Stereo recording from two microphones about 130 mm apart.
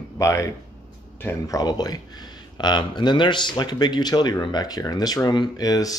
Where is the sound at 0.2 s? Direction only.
25° left (ahead or behind).